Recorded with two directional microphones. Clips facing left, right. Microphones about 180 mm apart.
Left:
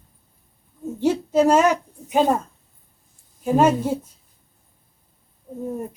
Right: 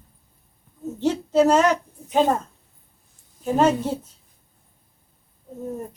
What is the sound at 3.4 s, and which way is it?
Speech, 10° left (ahead or behind).